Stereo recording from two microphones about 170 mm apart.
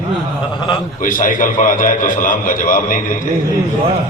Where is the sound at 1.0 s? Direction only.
55° left (ahead or behind).